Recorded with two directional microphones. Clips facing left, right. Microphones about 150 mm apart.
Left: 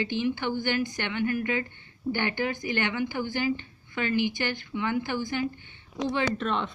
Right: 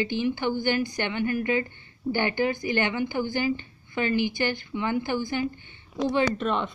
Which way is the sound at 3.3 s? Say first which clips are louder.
Right 1 dB; 40° right (ahead or behind).